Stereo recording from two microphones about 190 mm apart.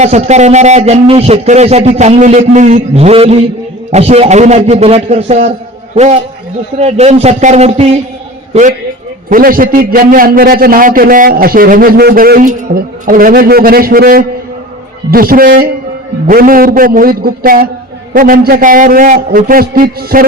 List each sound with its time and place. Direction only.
0.0 s a man's voice: 35° right (ahead or behind)
9.3 s a man's voice: 50° right (ahead or behind)